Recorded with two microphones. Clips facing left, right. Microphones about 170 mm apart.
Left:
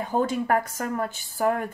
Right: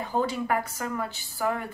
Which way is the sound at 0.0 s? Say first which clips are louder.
Left 3 dB; 50° left (ahead or behind).